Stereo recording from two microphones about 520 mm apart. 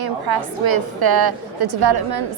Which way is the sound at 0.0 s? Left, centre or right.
Right.